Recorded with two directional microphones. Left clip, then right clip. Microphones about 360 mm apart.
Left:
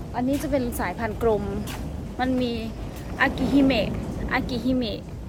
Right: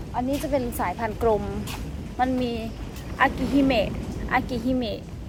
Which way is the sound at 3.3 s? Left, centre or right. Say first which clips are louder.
Left 2 dB; left.